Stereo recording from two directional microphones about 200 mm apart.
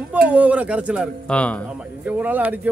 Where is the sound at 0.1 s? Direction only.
5° right (ahead or behind).